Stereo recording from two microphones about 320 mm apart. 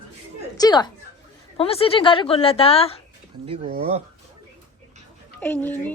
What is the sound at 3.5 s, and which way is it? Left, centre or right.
Speech, centre.